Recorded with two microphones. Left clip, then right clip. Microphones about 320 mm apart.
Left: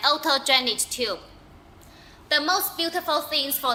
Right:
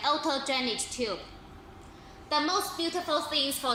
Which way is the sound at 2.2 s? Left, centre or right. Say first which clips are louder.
Left 5 dB; left.